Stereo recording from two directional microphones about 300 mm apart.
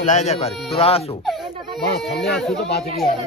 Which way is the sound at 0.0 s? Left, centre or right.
Left.